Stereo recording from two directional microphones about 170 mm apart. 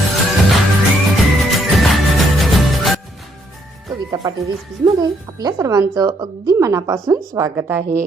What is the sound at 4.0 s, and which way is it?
Music, 20° right (ahead or behind).